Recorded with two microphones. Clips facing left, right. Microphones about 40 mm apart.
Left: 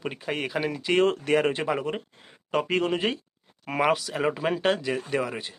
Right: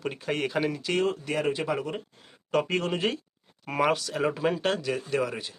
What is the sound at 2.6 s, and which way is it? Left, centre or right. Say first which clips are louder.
Speech: left 2 dB; centre.